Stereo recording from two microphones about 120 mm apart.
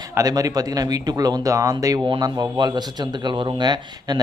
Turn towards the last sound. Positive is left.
turn(degrees=-35)  # may be behind; listen again after turning